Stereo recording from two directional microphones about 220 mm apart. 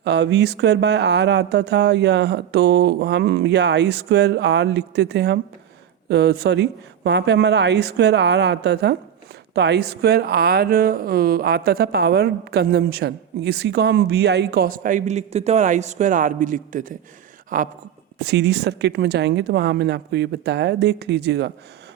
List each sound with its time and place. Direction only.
0.0 s speech: 50° right (ahead or behind)
18.2 s speech: 50° right (ahead or behind)